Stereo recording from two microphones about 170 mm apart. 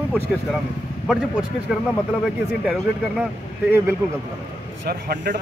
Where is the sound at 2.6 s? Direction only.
5° right (ahead or behind).